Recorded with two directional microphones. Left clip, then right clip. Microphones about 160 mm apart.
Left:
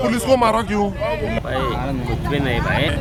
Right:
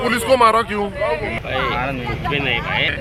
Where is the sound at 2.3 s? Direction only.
90° left.